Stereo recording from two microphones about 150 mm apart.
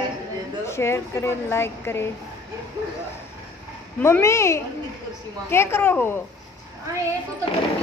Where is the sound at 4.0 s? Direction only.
15° left (ahead or behind).